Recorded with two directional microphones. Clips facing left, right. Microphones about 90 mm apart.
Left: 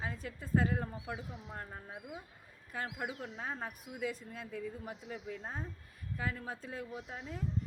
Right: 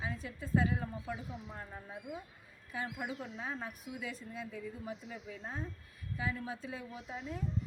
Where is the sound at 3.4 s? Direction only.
45° left (ahead or behind).